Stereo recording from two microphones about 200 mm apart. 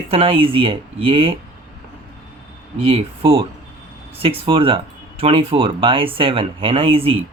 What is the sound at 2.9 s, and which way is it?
Speech, 25° right (ahead or behind).